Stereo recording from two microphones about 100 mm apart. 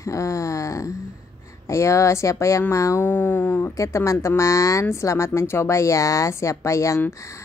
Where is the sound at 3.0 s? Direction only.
20° left (ahead or behind).